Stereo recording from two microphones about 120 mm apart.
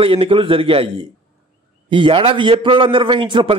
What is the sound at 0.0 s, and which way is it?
Speech, 50° right (ahead or behind).